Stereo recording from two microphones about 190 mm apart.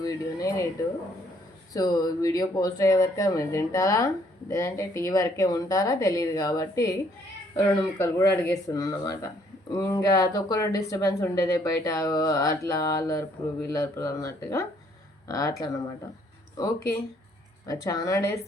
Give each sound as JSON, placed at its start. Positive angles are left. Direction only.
{"t": 0.0, "sound": "speech", "side_deg": 20}
{"t": 1.7, "sound": "speech", "side_deg": 20}
{"t": 17.7, "sound": "speech", "side_deg": 20}